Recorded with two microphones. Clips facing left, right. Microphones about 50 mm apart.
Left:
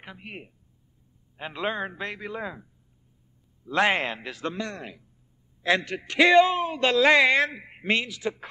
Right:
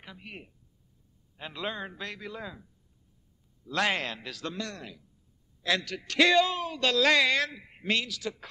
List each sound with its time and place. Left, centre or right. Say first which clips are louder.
0.0 s a man's voice: left 4 dB; left